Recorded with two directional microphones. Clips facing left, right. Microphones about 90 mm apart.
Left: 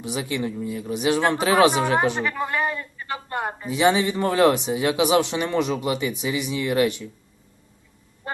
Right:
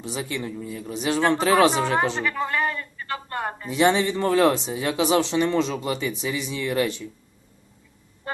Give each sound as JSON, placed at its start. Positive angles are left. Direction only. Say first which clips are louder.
{"t": 0.0, "sound": "speech", "louder": "left 3 dB", "side_deg": 15}
{"t": 3.7, "sound": "speech", "louder": "even", "side_deg": 0}
{"t": 4.0, "sound": "speech", "louder": "left 1 dB", "side_deg": 15}